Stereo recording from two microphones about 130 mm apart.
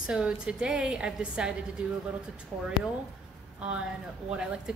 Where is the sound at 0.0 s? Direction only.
5° right (ahead or behind).